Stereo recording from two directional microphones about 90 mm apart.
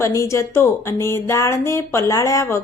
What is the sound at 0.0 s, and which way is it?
A woman's voice, 35° left (ahead or behind).